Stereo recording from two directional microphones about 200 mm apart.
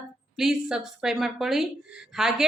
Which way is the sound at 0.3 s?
Centre (ahead or behind).